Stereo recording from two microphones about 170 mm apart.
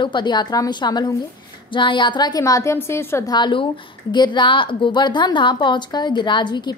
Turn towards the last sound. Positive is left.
turn(degrees=25)  # may be behind; listen again after turning